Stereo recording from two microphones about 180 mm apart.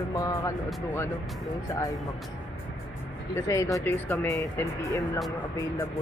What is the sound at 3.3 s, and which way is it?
Speech, 15° left (ahead or behind).